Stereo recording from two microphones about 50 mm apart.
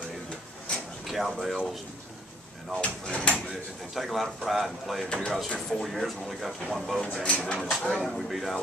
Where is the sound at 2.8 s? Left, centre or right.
Left.